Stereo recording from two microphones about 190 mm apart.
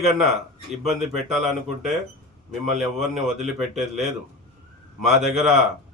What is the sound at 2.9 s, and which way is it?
Speech, 35° right (ahead or behind).